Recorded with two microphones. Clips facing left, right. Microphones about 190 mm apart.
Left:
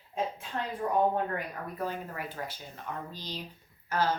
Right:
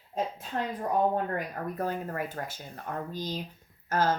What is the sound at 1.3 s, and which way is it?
Speech, 45° right (ahead or behind).